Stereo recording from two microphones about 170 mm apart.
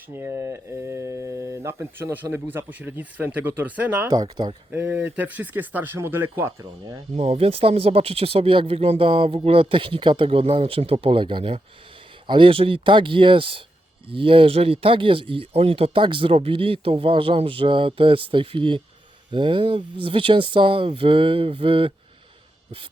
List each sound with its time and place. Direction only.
0.1 s speech: 15° right (ahead or behind)
4.1 s speech: 25° right (ahead or behind)
4.7 s speech: 10° right (ahead or behind)
7.2 s speech: 35° right (ahead or behind)